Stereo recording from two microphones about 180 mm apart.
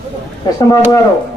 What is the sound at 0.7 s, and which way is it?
Speech, 20° left (ahead or behind).